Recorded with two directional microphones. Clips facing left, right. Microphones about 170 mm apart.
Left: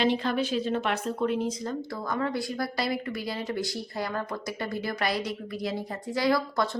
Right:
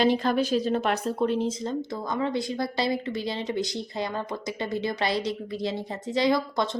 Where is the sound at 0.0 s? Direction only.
40° right (ahead or behind).